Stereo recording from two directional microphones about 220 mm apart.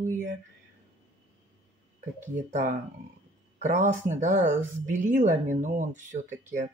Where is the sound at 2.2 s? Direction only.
35° right (ahead or behind).